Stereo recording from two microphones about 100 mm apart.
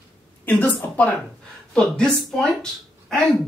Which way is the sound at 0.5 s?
15° left (ahead or behind).